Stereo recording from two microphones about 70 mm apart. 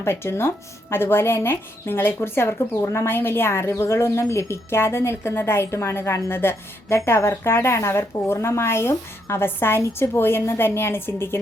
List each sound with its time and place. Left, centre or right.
0.0 s a woman's voice: left